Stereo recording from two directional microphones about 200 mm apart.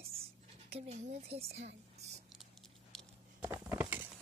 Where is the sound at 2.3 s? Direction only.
Centre (ahead or behind).